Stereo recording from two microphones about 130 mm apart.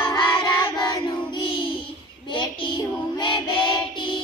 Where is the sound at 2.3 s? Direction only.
40° left (ahead or behind).